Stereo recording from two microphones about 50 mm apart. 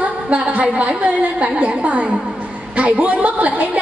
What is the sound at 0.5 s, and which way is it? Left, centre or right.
A woman's voice, right.